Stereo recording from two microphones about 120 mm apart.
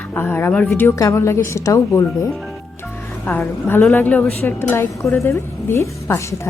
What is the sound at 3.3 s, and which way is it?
A woman's voice, 20° left (ahead or behind).